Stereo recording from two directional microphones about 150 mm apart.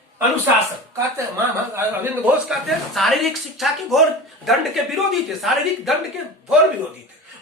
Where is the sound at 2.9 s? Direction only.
Centre (ahead or behind).